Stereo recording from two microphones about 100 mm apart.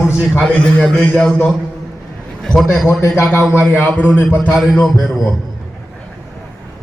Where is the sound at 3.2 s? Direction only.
5° left (ahead or behind).